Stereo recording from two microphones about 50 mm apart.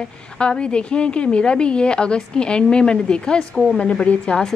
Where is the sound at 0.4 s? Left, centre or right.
Centre.